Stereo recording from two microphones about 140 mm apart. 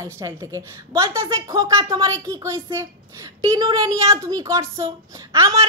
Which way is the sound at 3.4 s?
30° right (ahead or behind).